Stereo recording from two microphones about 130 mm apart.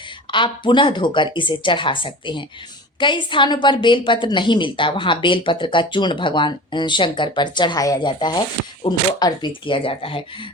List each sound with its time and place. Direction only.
0.3 s a woman's voice: 40° left (ahead or behind)